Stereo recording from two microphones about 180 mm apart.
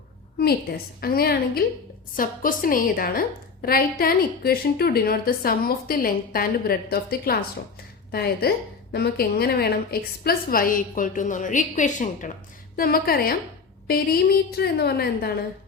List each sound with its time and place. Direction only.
1.0 s a woman's voice: 60° left (ahead or behind)
12.7 s a woman's voice: 55° left (ahead or behind)